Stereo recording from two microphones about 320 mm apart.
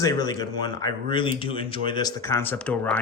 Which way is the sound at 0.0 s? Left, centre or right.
Centre.